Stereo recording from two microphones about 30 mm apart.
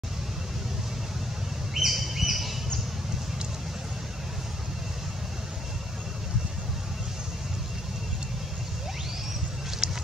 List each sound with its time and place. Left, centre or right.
1.7 s bird: centre
9.8 s vehicle: centre